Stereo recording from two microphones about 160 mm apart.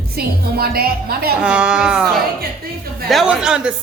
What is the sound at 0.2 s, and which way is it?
A woman's voice, 70° right (ahead or behind).